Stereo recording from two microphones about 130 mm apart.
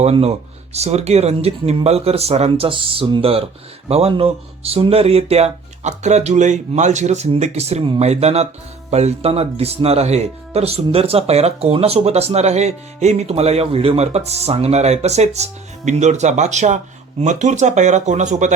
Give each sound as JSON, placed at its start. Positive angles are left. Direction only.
{"t": 0.0, "sound": "speech", "side_deg": -50}